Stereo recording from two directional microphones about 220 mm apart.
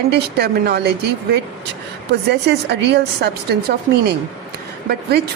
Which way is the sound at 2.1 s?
50° right (ahead or behind).